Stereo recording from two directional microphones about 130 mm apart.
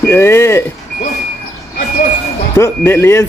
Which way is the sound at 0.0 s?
20° left (ahead or behind).